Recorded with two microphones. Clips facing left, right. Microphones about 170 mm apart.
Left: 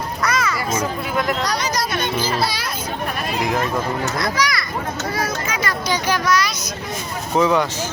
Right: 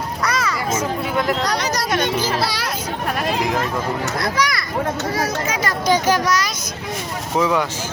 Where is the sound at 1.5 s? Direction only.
65° right (ahead or behind).